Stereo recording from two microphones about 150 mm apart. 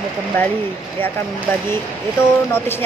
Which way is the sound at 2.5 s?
15° left (ahead or behind).